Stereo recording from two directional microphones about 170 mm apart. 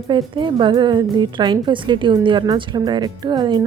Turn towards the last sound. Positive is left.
turn(degrees=-25)  # may be behind; listen again after turning